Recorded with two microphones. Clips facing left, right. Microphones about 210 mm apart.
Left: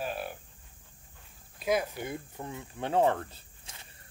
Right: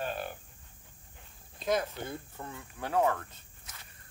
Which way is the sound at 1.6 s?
10° left (ahead or behind).